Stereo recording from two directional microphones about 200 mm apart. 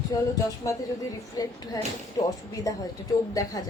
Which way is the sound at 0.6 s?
15° left (ahead or behind).